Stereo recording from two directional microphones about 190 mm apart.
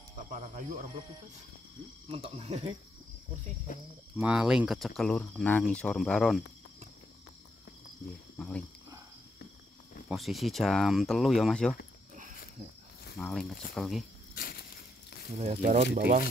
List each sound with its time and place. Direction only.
0.3 s speech: 40° right (ahead or behind)
2.0 s speech: 30° right (ahead or behind)
3.7 s speech: 45° left (ahead or behind)
4.2 s speech: 5° right (ahead or behind)
8.4 s speech: 5° left (ahead or behind)
10.0 s speech: centre (ahead or behind)
13.2 s speech: centre (ahead or behind)
14.3 s crushing: 50° left (ahead or behind)
15.3 s speech: 40° right (ahead or behind)
15.8 s speech: 55° right (ahead or behind)